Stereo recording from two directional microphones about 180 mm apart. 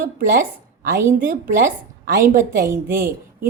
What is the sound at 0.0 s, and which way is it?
A woman's voice, 50° right (ahead or behind).